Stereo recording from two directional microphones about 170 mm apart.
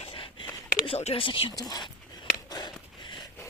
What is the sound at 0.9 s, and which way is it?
Speech, 35° left (ahead or behind).